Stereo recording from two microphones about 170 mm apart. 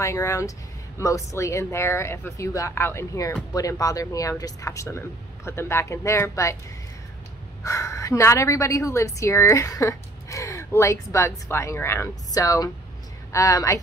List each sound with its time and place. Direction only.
0.0 s a woman's voice: 15° left (ahead or behind)
7.6 s a woman's voice: 20° left (ahead or behind)